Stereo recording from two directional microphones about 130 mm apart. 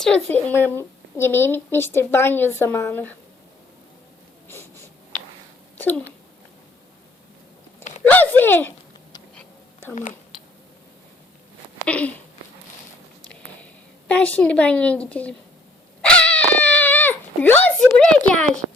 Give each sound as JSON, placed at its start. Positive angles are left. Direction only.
{"t": 0.0, "sound": "speech", "side_deg": 10}
{"t": 4.4, "sound": "a sound", "side_deg": 20}
{"t": 8.0, "sound": "speech", "side_deg": 15}
{"t": 11.9, "sound": "speech", "side_deg": 10}
{"t": 14.1, "sound": "speech", "side_deg": 10}
{"t": 16.0, "sound": "dog", "side_deg": 10}
{"t": 18.3, "sound": "speech", "side_deg": 10}